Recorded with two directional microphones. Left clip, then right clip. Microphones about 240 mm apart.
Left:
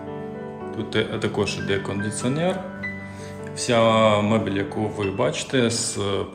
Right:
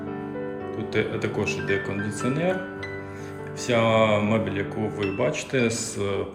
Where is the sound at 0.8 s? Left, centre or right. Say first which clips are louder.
Left 2 dB; centre.